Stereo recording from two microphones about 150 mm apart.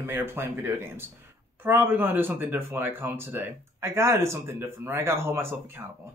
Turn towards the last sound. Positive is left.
turn(degrees=-15)  # may be behind; listen again after turning